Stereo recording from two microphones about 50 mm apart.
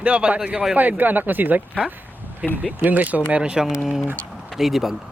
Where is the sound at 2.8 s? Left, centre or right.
Right.